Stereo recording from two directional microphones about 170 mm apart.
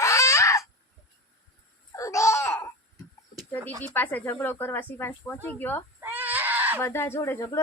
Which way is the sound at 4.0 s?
10° left (ahead or behind).